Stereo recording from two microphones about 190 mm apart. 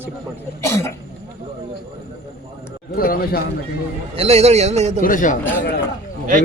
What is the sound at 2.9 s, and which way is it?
Speech, 50° left (ahead or behind).